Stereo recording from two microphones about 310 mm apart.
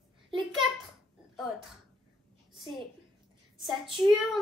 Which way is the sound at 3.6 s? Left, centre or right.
Centre.